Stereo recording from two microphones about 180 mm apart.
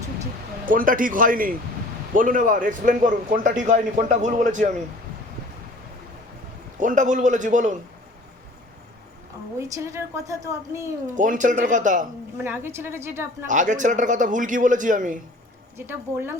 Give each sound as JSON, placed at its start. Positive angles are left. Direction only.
{"t": 0.6, "sound": "a man's voice", "side_deg": -50}
{"t": 6.7, "sound": "a man's voice", "side_deg": -45}
{"t": 9.6, "sound": "a woman's voice", "side_deg": -15}
{"t": 11.0, "sound": "a man's voice", "side_deg": -45}
{"t": 12.4, "sound": "a woman's voice", "side_deg": -15}
{"t": 13.5, "sound": "a man's voice", "side_deg": -45}
{"t": 15.9, "sound": "a woman's voice", "side_deg": -10}